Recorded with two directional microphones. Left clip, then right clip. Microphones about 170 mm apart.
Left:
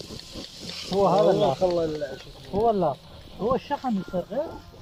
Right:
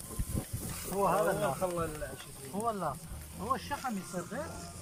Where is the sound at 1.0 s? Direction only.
30° left (ahead or behind).